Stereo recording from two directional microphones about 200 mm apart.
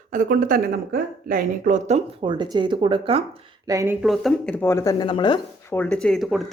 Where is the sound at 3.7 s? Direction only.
15° right (ahead or behind).